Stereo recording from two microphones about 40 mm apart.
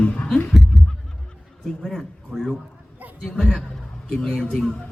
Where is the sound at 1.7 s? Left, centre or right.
Centre.